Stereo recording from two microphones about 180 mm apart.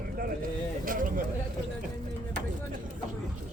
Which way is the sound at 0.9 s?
50° right (ahead or behind).